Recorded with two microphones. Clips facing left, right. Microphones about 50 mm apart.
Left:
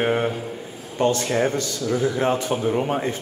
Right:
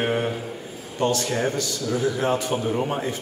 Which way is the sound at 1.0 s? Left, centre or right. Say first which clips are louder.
Left 3 dB; left.